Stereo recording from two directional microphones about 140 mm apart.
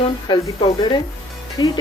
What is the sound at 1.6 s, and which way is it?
Speech, 30° left (ahead or behind).